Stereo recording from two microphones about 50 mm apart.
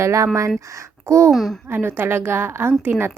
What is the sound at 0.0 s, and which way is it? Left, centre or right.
Speech, right.